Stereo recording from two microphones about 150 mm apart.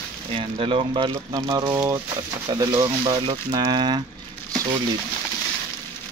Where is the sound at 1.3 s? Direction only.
25° right (ahead or behind).